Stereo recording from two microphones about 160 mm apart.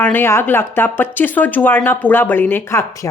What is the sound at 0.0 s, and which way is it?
Speech, 15° left (ahead or behind).